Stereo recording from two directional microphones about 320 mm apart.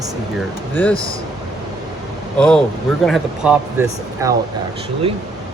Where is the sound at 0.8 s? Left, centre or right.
Centre.